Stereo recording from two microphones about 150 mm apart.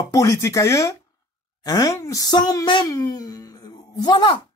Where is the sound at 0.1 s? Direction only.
20° left (ahead or behind).